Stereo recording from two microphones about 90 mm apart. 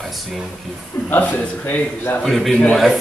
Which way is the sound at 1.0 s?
20° left (ahead or behind).